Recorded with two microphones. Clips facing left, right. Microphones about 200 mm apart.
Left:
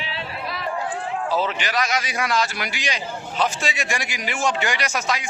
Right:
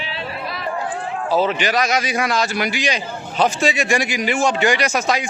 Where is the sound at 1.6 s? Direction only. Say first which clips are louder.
Right 5 dB; 15° right (ahead or behind).